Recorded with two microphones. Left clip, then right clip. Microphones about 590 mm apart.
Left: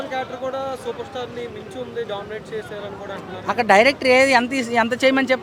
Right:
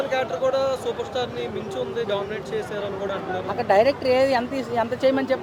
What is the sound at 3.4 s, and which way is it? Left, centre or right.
Speech, left.